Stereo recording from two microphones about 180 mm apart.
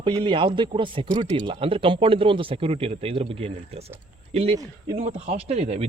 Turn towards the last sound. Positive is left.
turn(degrees=-35)  # may be behind; listen again after turning